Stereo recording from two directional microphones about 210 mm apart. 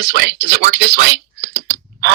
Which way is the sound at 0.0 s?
60° right (ahead or behind).